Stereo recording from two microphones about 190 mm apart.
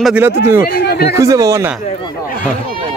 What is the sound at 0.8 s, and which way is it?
Speech, 55° left (ahead or behind).